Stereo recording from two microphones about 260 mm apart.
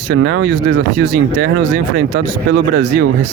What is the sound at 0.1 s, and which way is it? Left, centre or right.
Speech, right.